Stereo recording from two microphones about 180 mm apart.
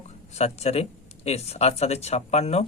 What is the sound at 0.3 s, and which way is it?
Speech, 35° left (ahead or behind).